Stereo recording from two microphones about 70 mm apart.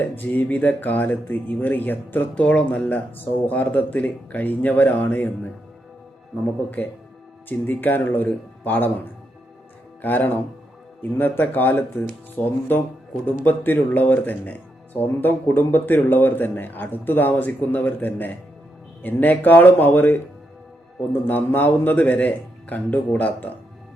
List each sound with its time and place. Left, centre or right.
0.0 s a man's voice: left
6.7 s a man's voice: left
10.0 s a man's voice: left